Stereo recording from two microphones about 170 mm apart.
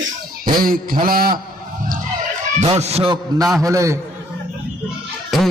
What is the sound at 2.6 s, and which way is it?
Fowl, 40° right (ahead or behind).